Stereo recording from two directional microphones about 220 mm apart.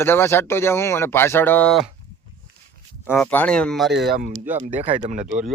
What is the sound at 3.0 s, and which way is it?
Speech, 5° left (ahead or behind).